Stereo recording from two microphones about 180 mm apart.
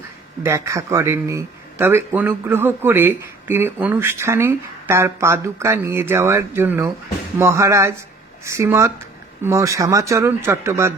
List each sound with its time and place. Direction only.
0.4 s a man's voice: 15° right (ahead or behind)